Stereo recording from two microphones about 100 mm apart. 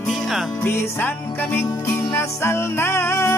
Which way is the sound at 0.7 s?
20° left (ahead or behind).